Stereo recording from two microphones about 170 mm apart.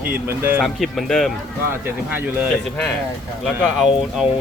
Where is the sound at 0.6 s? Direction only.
Centre (ahead or behind).